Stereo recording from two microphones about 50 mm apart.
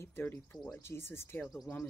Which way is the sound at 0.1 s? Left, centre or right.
Left.